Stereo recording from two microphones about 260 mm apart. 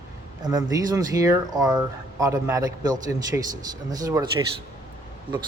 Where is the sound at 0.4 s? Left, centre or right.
Centre.